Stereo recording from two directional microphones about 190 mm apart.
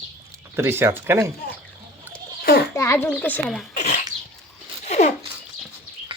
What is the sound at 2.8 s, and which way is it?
Speech, 15° left (ahead or behind).